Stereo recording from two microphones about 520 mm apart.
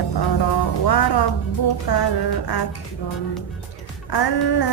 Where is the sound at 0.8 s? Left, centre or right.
Left.